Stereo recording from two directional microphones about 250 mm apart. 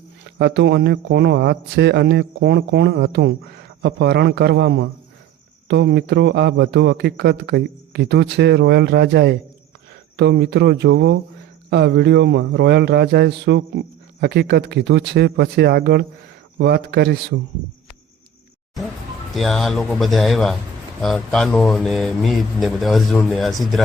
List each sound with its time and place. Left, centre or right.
0.3 s a man's voice: right
19.3 s speech: centre